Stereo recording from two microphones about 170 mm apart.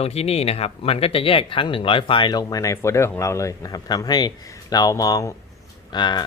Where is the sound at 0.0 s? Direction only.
35° left (ahead or behind).